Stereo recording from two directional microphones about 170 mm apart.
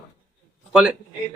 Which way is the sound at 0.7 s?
5° right (ahead or behind).